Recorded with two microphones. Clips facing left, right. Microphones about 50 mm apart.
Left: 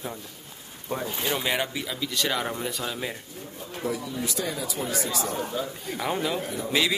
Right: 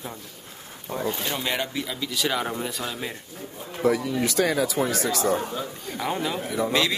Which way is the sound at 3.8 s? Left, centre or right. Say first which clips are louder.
Right 8 dB; right.